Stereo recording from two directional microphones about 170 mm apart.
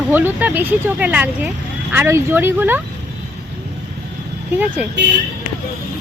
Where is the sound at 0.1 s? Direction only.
15° right (ahead or behind).